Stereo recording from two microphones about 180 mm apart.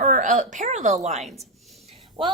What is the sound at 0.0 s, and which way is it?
A woman's voice, 45° right (ahead or behind).